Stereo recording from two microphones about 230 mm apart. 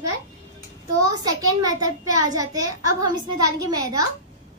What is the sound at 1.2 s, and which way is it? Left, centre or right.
A child's voice, centre.